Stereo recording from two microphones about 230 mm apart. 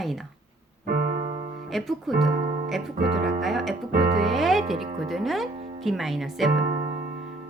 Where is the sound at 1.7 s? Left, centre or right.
Centre.